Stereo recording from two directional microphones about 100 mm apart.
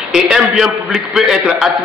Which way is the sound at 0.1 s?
5° right (ahead or behind).